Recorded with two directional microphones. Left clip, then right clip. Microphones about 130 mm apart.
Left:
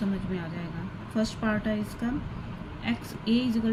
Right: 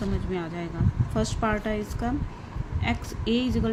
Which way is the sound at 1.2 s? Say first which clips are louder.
Right 3 dB; 40° right (ahead or behind).